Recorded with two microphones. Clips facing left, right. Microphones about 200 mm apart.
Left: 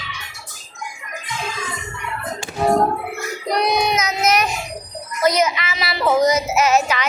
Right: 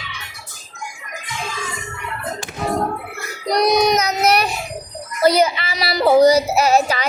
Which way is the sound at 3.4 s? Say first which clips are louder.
Right 4 dB; 35° right (ahead or behind).